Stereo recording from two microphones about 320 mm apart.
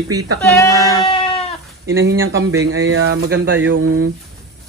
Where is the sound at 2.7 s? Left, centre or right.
Right.